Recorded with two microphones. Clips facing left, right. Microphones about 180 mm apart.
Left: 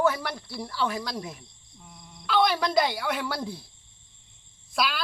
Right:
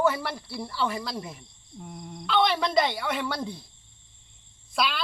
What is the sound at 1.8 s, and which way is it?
Fowl, 50° right (ahead or behind).